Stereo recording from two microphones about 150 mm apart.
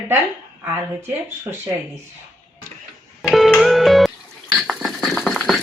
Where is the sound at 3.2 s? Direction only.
Centre (ahead or behind).